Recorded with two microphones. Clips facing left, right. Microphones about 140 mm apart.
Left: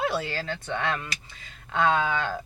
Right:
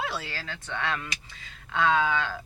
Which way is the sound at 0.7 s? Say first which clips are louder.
Left 2 dB; 55° left (ahead or behind).